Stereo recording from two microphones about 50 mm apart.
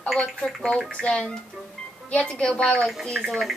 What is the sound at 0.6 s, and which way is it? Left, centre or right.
A woman's voice, centre.